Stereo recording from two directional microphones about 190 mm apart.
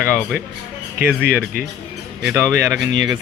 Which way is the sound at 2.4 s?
15° right (ahead or behind).